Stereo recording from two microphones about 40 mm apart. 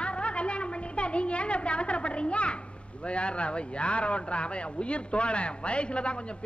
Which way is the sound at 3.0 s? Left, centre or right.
Left.